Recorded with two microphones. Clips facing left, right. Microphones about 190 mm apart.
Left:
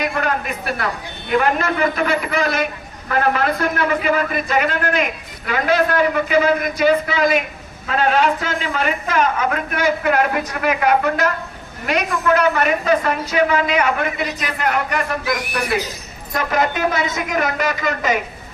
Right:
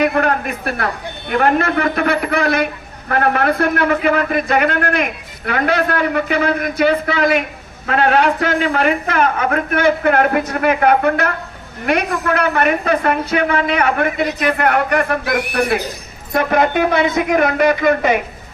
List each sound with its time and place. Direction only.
0.0 s a man's voice: 60° right (ahead or behind)